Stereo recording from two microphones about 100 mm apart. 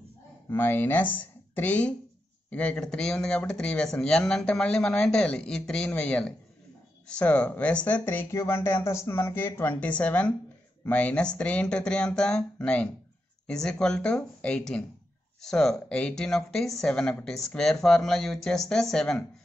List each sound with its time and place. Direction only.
0.5 s speech: 20° left (ahead or behind)